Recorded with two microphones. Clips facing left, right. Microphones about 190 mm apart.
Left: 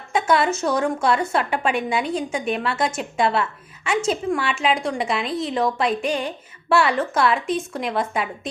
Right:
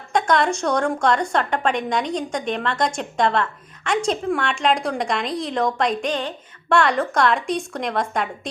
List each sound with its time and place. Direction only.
0.1 s a woman's voice: 5° left (ahead or behind)